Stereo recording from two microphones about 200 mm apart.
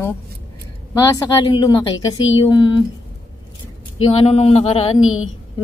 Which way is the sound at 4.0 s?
30° left (ahead or behind).